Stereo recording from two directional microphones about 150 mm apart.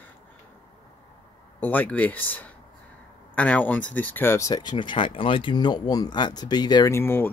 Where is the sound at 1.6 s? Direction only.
10° left (ahead or behind).